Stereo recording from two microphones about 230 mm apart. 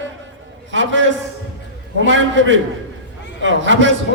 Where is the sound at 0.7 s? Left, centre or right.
Right.